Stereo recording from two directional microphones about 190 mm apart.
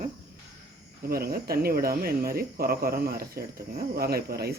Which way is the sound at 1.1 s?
55° right (ahead or behind).